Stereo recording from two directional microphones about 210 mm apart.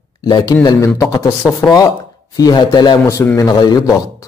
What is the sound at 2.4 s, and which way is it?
Speech, 20° left (ahead or behind).